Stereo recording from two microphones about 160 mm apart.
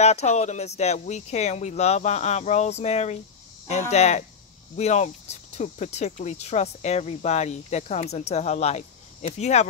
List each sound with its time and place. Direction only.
0.0 s speech: 45° left (ahead or behind)